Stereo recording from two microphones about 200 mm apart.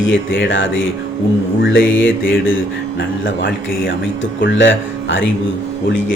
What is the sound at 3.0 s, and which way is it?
Speech, 70° left (ahead or behind).